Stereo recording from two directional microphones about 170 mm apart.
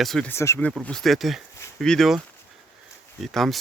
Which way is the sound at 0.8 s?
Centre (ahead or behind).